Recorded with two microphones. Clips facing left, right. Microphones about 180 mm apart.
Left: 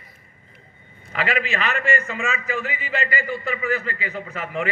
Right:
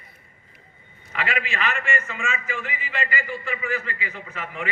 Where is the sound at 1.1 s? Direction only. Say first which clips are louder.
Left 4 dB; 35° left (ahead or behind).